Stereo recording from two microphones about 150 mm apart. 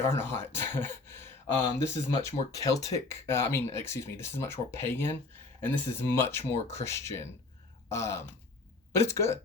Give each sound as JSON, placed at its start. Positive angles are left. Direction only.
{"t": 0.1, "sound": "speech", "side_deg": 15}